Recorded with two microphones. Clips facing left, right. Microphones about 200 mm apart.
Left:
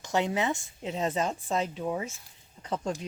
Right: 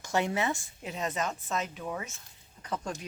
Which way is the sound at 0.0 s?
20° left (ahead or behind).